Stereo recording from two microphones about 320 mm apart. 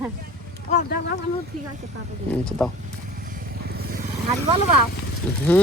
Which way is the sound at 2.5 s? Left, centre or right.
Centre.